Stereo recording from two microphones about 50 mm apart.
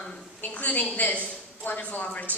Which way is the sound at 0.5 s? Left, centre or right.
Left.